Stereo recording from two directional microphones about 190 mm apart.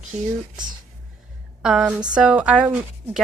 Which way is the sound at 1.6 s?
5° right (ahead or behind).